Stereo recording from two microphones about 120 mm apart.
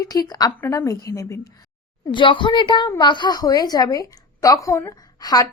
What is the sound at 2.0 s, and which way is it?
A woman's voice, 45° left (ahead or behind).